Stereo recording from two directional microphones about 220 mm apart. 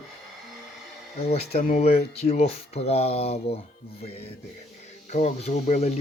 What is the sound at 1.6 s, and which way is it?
Speech, 30° left (ahead or behind).